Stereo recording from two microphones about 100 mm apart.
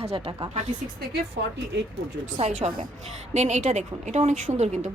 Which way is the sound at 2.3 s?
90° right.